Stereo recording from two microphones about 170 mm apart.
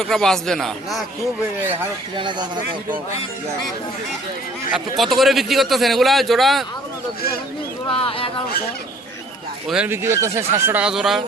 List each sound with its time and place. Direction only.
0.0 s a man's voice: centre (ahead or behind)
2.1 s speech: 25° right (ahead or behind)
4.7 s a man's voice: centre (ahead or behind)
7.9 s speech: 30° left (ahead or behind)
9.6 s speech: 5° right (ahead or behind)